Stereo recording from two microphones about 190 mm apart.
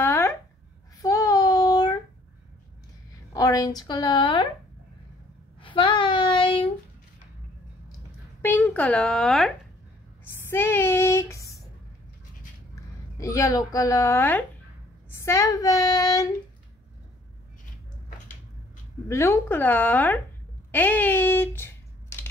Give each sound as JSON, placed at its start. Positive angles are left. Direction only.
{"t": 0.0, "sound": "a sound", "side_deg": 10}
{"t": 1.0, "sound": "child singing", "side_deg": 20}
{"t": 3.3, "sound": "a woman's voice", "side_deg": 20}
{"t": 5.6, "sound": "child singing", "side_deg": 25}
{"t": 8.4, "sound": "speech", "side_deg": 10}
{"t": 10.2, "sound": "a sound", "side_deg": 10}
{"t": 13.2, "sound": "a woman's voice", "side_deg": 15}
{"t": 19.0, "sound": "a woman's voice", "side_deg": 15}
{"t": 20.7, "sound": "a sound", "side_deg": 10}